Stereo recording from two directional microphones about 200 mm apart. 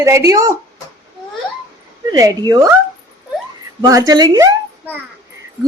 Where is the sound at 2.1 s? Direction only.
20° right (ahead or behind).